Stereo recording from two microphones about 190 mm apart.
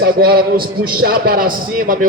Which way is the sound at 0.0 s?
55° right (ahead or behind).